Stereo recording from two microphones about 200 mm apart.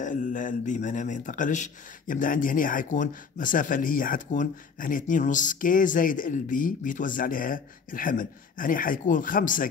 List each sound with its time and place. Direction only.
0.0 s speech: 40° left (ahead or behind)